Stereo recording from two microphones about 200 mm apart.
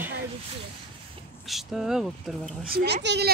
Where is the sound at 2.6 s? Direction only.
55° right (ahead or behind).